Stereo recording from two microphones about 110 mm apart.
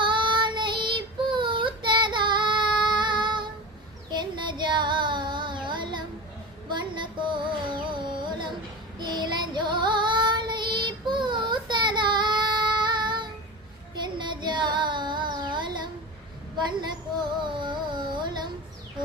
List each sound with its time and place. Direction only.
0.0 s child singing: 45° right (ahead or behind)
6.7 s music: 45° right (ahead or behind)
9.0 s child singing: 40° right (ahead or behind)
16.6 s a sound: 40° right (ahead or behind)
17.4 s music: 45° right (ahead or behind)